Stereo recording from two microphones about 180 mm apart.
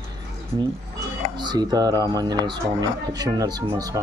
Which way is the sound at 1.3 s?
25° right (ahead or behind).